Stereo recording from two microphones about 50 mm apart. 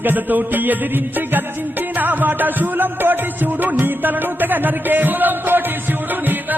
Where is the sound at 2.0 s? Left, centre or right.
Right.